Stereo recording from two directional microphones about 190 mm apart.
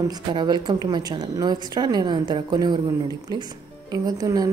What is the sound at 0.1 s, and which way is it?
A woman's voice, 25° right (ahead or behind).